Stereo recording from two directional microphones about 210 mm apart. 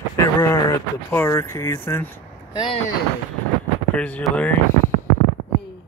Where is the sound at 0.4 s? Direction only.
15° left (ahead or behind).